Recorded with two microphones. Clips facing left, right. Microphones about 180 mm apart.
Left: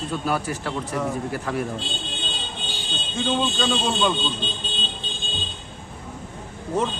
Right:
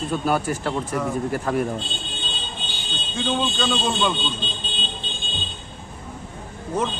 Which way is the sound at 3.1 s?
Centre (ahead or behind).